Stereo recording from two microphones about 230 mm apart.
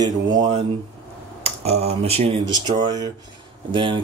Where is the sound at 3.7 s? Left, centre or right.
Right.